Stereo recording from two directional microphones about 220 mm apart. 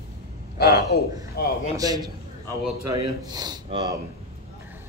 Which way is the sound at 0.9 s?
50° left (ahead or behind).